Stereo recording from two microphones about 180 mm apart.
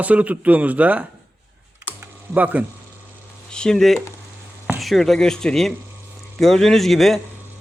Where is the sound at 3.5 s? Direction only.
5° left (ahead or behind).